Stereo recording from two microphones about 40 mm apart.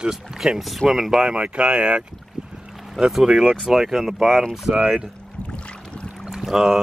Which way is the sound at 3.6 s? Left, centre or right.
Centre.